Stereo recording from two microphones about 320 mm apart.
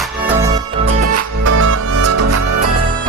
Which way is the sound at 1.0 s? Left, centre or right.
Right.